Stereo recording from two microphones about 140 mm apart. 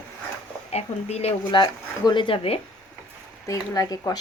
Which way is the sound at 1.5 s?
35° left (ahead or behind).